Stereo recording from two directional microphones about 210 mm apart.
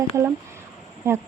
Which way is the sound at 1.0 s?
10° right (ahead or behind).